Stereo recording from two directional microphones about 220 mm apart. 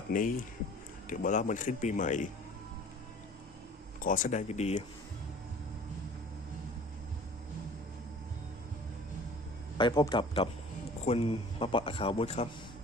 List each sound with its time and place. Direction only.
0.1 s a man's voice: 40° left (ahead or behind)
4.0 s a man's voice: 35° left (ahead or behind)
9.7 s speech: 20° left (ahead or behind)